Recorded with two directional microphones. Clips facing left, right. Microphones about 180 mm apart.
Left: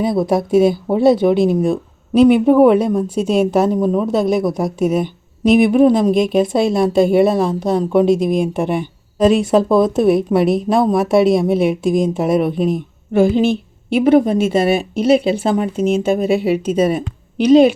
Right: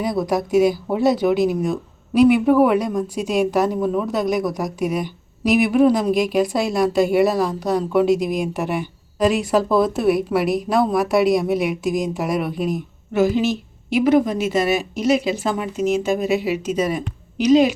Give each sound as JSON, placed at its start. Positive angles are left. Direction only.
{"t": 0.0, "sound": "a woman's voice", "side_deg": 25}